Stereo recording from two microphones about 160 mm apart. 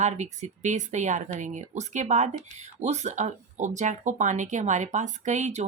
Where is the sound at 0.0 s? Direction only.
45° right (ahead or behind).